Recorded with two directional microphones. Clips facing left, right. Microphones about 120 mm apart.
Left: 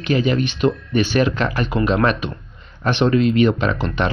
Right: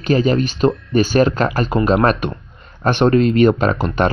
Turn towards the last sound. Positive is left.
turn(degrees=-45)  # may be behind; listen again after turning